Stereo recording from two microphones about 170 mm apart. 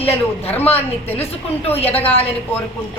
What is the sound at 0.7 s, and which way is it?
A woman's voice, 35° left (ahead or behind).